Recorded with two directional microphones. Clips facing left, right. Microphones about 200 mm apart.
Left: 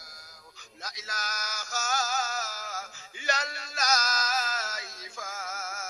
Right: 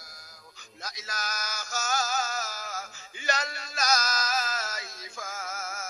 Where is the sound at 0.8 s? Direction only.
50° right (ahead or behind).